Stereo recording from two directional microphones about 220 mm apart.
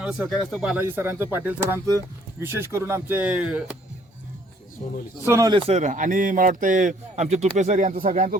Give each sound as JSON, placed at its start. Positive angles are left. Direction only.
{"t": 0.0, "sound": "speech", "side_deg": -5}
{"t": 5.2, "sound": "a man's voice", "side_deg": -15}